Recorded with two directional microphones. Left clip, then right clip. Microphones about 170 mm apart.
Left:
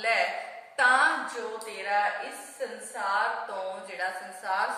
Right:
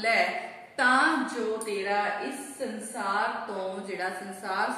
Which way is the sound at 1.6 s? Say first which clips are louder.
Left 4 dB; centre (ahead or behind).